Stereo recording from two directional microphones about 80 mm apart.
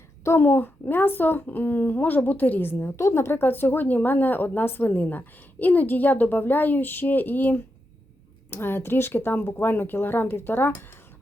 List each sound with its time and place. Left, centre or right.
0.3 s a child's voice: left